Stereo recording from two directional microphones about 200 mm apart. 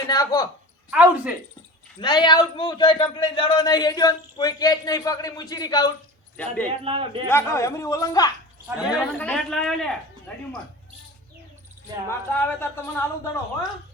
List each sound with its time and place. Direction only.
0.1 s a man's voice: 20° left (ahead or behind)
0.9 s speech: 5° right (ahead or behind)
2.0 s a man's voice: 20° left (ahead or behind)
6.3 s speech: 5° left (ahead or behind)
6.8 s a man's voice: 25° right (ahead or behind)
7.3 s speech: 10° left (ahead or behind)
8.8 s speech: centre (ahead or behind)
12.0 s speech: 10° left (ahead or behind)